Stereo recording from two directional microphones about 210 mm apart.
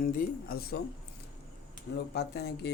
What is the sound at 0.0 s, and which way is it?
Speech, 40° left (ahead or behind).